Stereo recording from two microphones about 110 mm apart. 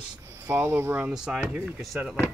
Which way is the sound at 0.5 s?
20° right (ahead or behind).